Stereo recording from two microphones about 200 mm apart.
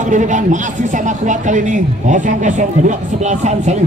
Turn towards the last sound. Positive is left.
turn(degrees=-35)  # may be behind; listen again after turning